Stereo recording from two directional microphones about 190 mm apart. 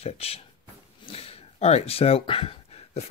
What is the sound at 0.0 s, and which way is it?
Speech, 30° left (ahead or behind).